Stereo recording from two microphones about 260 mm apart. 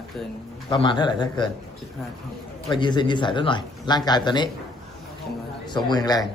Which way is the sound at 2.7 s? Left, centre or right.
Centre.